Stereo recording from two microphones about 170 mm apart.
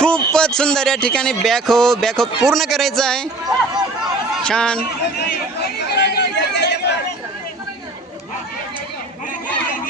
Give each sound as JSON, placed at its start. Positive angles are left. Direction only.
{"t": 0.0, "sound": "a man's voice", "side_deg": 5}
{"t": 3.4, "sound": "chatter", "side_deg": -20}
{"t": 4.4, "sound": "a man's voice", "side_deg": 5}
{"t": 5.9, "sound": "a sound", "side_deg": 75}